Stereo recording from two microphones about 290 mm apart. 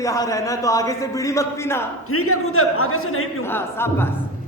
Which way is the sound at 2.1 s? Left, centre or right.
Left.